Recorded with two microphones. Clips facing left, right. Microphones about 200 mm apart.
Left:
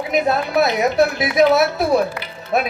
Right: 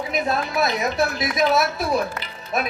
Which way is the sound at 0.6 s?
65° left (ahead or behind).